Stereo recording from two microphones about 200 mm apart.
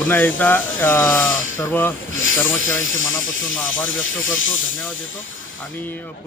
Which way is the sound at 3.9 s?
75° left (ahead or behind).